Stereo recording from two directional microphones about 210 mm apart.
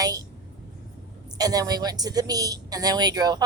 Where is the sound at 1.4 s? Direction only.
15° right (ahead or behind).